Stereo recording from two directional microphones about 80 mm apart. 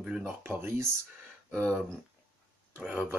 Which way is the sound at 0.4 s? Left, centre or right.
Right.